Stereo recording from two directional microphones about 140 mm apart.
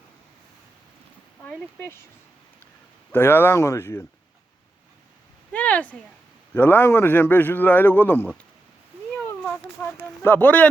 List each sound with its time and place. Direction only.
1.5 s a man's voice: 15° left (ahead or behind)
3.1 s a man's voice: 15° left (ahead or behind)
5.5 s a man's voice: 10° left (ahead or behind)
10.0 s a man's voice: 15° left (ahead or behind)